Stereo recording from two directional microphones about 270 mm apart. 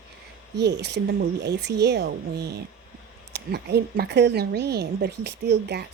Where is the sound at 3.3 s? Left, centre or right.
Right.